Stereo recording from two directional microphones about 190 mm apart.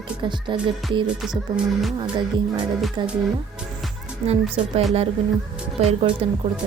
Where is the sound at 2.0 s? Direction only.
25° right (ahead or behind).